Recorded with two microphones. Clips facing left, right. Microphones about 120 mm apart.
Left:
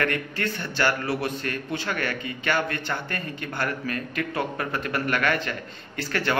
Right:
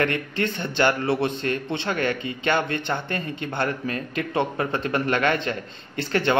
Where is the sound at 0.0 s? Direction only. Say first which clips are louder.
Right 3 dB; 25° right (ahead or behind).